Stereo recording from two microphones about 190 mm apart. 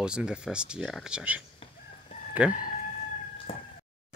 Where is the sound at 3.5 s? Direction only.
30° left (ahead or behind).